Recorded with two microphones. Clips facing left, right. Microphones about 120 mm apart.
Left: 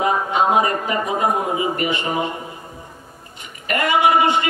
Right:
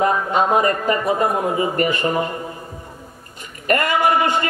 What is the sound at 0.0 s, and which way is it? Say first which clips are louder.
A man's voice: right 1 dB; 45° right (ahead or behind).